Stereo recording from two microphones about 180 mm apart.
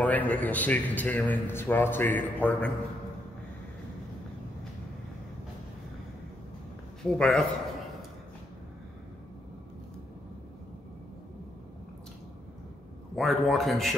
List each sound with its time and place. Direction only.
0.0 s a man's voice: 10° left (ahead or behind)
7.0 s a man's voice: 5° left (ahead or behind)
13.1 s a man's voice: centre (ahead or behind)